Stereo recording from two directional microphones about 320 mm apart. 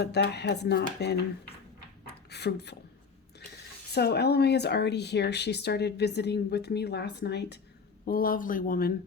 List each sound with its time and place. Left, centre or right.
0.0 s speech: left
2.3 s speech: left
3.9 s speech: left